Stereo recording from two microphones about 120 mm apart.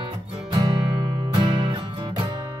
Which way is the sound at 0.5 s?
35° right (ahead or behind).